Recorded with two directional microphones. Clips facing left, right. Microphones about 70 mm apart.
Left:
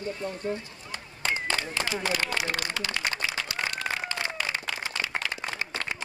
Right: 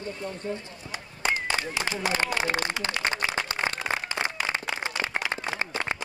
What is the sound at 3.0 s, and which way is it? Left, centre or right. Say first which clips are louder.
Applause: right 3 dB; right.